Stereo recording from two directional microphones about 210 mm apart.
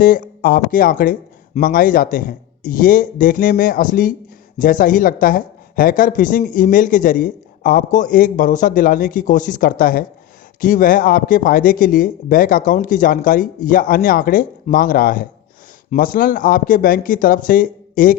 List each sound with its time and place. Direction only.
0.0 s speech: 40° left (ahead or behind)